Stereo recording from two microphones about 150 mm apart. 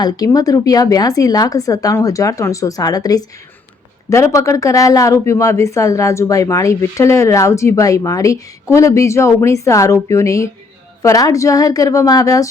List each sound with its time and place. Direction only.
0.3 s speech: 25° left (ahead or behind)